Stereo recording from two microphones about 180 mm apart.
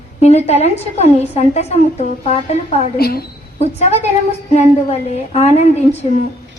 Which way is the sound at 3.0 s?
60° left (ahead or behind).